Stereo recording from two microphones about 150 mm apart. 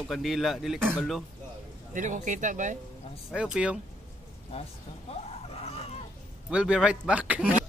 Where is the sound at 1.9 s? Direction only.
60° right (ahead or behind).